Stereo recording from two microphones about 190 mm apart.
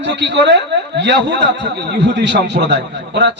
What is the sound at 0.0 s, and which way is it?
A man's voice, 65° right (ahead or behind).